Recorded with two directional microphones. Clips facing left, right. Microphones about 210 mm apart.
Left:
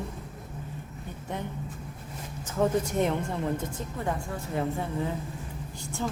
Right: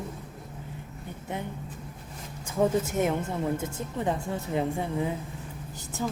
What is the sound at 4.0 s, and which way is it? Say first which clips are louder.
Speech: right 4 dB; 20° right (ahead or behind).